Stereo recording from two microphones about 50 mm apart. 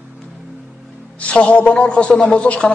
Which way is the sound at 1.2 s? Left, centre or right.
Left.